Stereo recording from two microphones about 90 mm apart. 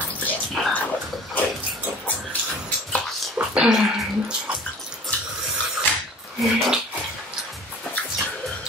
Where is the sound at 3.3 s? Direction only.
10° right (ahead or behind).